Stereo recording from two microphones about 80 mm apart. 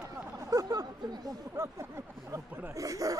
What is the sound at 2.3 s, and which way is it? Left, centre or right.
Speech, right.